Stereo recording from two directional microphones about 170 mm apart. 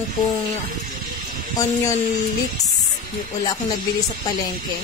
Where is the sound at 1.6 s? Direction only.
20° left (ahead or behind).